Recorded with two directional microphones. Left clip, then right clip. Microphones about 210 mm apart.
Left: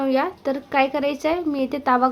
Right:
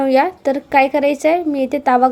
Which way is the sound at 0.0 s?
20° right (ahead or behind).